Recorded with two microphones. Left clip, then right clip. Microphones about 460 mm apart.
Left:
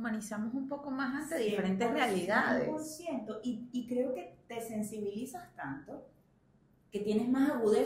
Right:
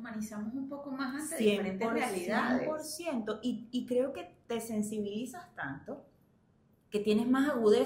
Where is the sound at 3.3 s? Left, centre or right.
Right.